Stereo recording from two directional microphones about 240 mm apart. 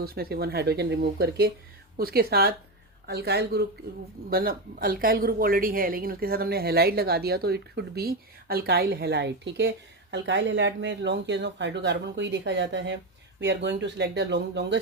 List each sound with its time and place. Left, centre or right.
0.0 s speech: right